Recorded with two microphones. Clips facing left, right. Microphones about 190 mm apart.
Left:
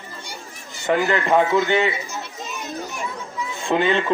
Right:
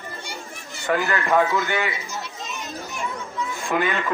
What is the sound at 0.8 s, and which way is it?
A man's voice, 20° left (ahead or behind).